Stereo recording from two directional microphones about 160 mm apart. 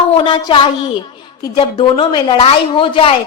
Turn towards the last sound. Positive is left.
turn(degrees=30)  # may be behind; listen again after turning